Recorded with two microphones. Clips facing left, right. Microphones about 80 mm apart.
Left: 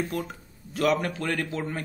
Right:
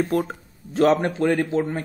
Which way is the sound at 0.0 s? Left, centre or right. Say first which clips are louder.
Right 8 dB; right.